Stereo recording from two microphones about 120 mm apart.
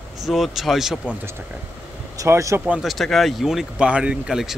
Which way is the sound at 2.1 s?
25° right (ahead or behind).